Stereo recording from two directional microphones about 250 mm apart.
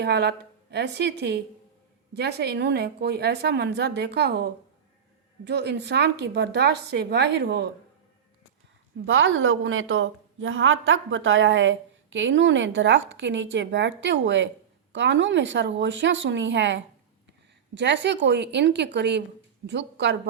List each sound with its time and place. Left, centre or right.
0.0 s a woman's voice: right
5.5 s a woman's voice: right
9.0 s a woman's voice: right